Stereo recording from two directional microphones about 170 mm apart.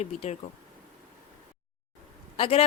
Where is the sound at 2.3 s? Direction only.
35° left (ahead or behind).